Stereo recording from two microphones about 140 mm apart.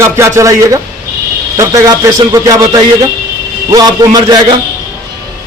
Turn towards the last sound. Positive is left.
turn(degrees=-30)  # may be behind; listen again after turning